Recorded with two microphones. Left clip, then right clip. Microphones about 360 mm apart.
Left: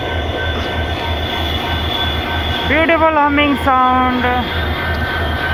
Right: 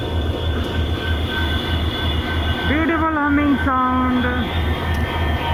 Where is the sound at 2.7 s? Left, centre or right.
Centre.